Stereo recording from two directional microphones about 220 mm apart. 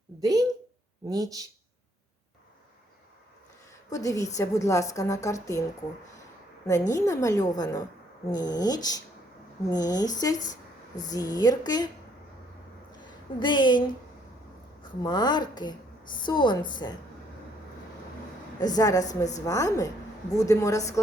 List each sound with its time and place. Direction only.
0.2 s speech: 15° right (ahead or behind)
3.8 s a woman's voice: 15° left (ahead or behind)
6.7 s a woman's voice: 15° left (ahead or behind)
10.3 s speech: 35° left (ahead or behind)
11.1 s a woman's voice: 15° left (ahead or behind)
13.4 s a woman's voice: 20° left (ahead or behind)
15.0 s a woman's voice: 20° left (ahead or behind)
18.6 s a woman's voice: 15° left (ahead or behind)